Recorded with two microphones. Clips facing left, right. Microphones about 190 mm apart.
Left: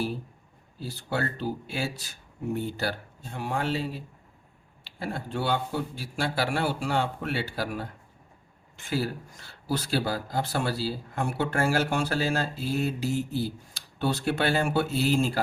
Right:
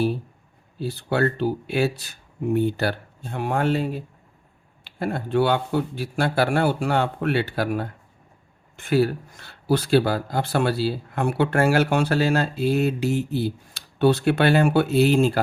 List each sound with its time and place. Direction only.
0.8 s speech: 65° right (ahead or behind)